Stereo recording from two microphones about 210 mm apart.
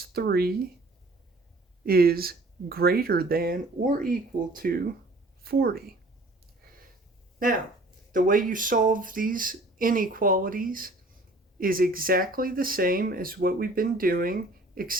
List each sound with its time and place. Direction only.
0.1 s speech: 50° right (ahead or behind)
1.8 s a woman's voice: 45° right (ahead or behind)
7.3 s speech: 40° right (ahead or behind)